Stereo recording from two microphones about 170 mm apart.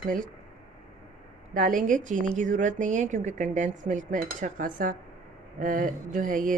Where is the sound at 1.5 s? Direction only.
50° right (ahead or behind).